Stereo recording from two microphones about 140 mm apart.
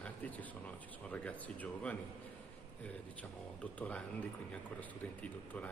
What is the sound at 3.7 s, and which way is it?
Speech, 10° left (ahead or behind).